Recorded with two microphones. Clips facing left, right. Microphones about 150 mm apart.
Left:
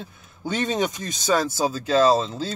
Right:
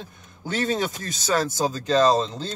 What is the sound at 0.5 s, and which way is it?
Speech, 20° left (ahead or behind).